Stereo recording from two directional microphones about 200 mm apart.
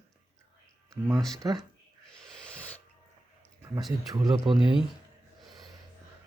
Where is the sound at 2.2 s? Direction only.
5° left (ahead or behind).